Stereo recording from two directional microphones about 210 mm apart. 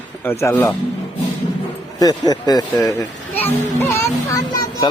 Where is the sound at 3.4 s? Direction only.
10° left (ahead or behind).